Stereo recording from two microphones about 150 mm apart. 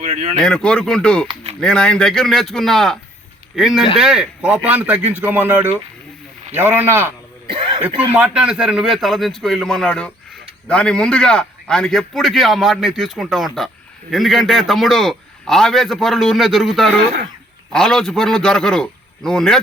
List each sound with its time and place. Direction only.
0.0 s speech: 50° right (ahead or behind)
0.4 s a man's voice: 5° left (ahead or behind); by 7.1 s 15° right (ahead or behind)
7.4 s cough: 35° right (ahead or behind)
7.9 s a man's voice: 10° right (ahead or behind)